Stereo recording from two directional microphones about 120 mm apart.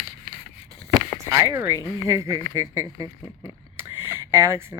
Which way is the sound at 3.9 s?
20° right (ahead or behind).